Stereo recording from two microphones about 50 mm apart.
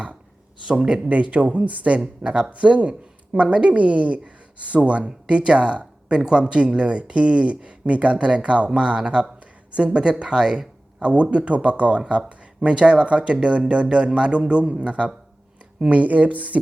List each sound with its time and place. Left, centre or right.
0.6 s speech: centre